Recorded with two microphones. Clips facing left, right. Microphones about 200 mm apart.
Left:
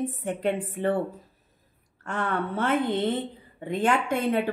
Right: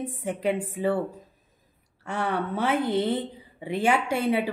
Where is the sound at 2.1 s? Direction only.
10° right (ahead or behind).